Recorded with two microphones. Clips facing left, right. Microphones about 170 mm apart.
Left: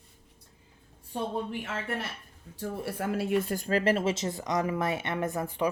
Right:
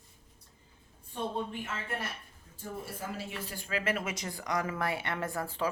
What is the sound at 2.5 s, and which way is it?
Speech, 70° left (ahead or behind).